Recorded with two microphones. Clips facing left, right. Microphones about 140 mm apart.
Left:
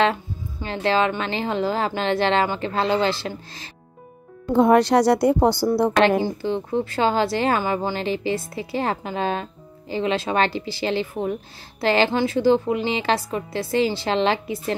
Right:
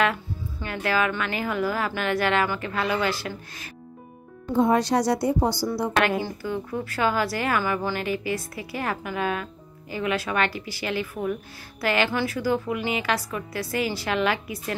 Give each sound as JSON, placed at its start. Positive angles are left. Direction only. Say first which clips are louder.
{"t": 0.0, "sound": "speech", "louder": "left 3 dB", "side_deg": 25}
{"t": 4.5, "sound": "a woman's voice", "louder": "left 5 dB", "side_deg": 65}
{"t": 6.4, "sound": "speech", "louder": "left 6 dB", "side_deg": 25}